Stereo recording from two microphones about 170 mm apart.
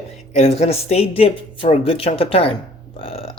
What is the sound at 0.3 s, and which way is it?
Speech, 40° left (ahead or behind).